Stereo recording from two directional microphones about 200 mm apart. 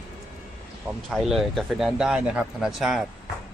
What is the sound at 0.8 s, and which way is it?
Speech, 5° right (ahead or behind).